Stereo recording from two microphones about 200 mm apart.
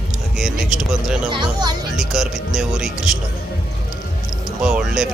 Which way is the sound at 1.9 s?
Centre (ahead or behind).